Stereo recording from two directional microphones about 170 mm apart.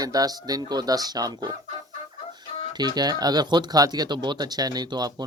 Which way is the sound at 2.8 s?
25° right (ahead or behind).